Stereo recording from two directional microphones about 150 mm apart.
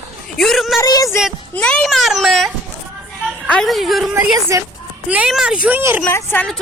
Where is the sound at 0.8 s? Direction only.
25° left (ahead or behind).